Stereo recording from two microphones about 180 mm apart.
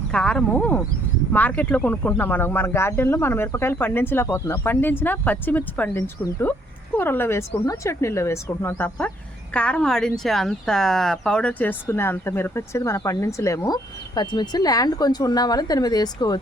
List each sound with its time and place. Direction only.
0.1 s a woman's voice: 5° left (ahead or behind); by 16.4 s 20° left (ahead or behind)